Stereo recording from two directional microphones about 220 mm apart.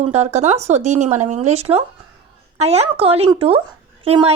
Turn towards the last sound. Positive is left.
turn(degrees=-25)  # may be behind; listen again after turning